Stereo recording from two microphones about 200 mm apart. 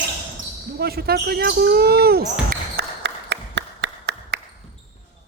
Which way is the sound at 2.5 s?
55° right (ahead or behind).